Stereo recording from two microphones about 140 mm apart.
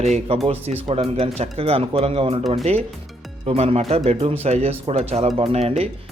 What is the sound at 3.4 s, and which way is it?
Speech, 45° right (ahead or behind).